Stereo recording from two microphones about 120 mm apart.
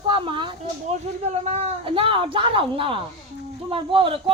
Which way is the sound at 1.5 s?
65° right (ahead or behind).